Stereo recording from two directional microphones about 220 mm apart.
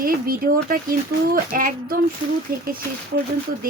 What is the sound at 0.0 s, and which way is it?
Speech, 40° right (ahead or behind).